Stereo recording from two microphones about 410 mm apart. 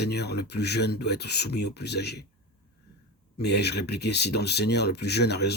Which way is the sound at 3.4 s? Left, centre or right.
Left.